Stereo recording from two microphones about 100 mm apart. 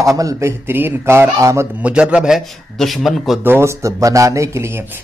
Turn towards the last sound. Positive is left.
turn(degrees=-25)  # may be behind; listen again after turning